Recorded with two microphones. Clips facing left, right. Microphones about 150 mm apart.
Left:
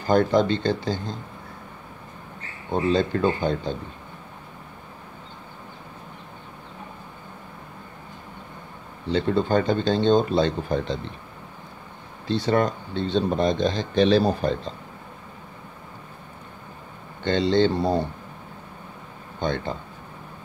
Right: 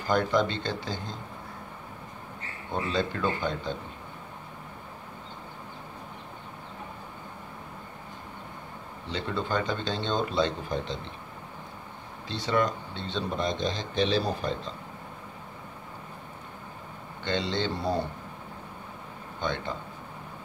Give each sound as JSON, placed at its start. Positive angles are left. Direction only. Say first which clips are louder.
{"t": 0.0, "sound": "speech", "louder": "left 6 dB", "side_deg": 35}
{"t": 2.7, "sound": "speech", "louder": "left 7 dB", "side_deg": 40}
{"t": 9.1, "sound": "speech", "louder": "left 9 dB", "side_deg": 40}
{"t": 12.4, "sound": "speech", "louder": "left 3 dB", "side_deg": 45}
{"t": 17.2, "sound": "speech", "louder": "left 9 dB", "side_deg": 40}
{"t": 19.4, "sound": "speech", "louder": "left 5 dB", "side_deg": 40}